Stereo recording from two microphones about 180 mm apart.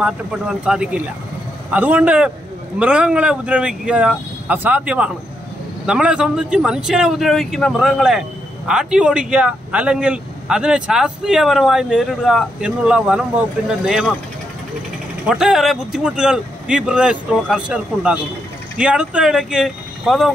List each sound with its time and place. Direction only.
0.0 s a man's voice: 5° right (ahead or behind)
15.2 s a man's voice: 5° right (ahead or behind)